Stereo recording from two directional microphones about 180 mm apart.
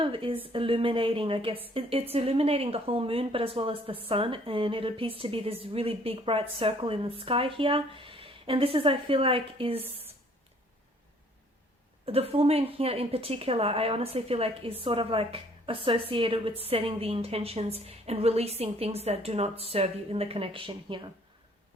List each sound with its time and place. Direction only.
0.0 s a woman's voice: 30° right (ahead or behind)
12.0 s speech: 35° right (ahead or behind)